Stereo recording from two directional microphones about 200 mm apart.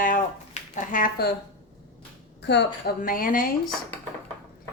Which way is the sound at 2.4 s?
60° left (ahead or behind).